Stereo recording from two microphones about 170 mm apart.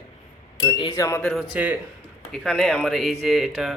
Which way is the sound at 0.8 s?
25° left (ahead or behind).